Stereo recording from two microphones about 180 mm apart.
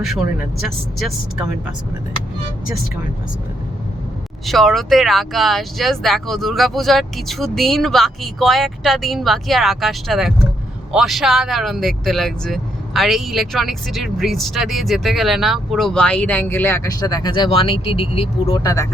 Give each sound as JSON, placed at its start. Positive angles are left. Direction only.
{"t": 0.0, "sound": "speech", "side_deg": 0}
{"t": 4.4, "sound": "speech", "side_deg": 0}
{"t": 18.6, "sound": "speech", "side_deg": 20}